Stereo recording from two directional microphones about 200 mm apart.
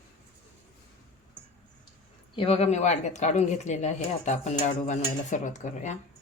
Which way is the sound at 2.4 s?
30° left (ahead or behind).